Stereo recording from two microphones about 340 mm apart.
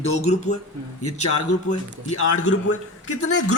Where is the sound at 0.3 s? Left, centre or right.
Centre.